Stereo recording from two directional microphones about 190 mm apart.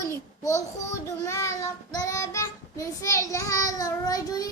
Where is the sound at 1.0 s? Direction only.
15° left (ahead or behind).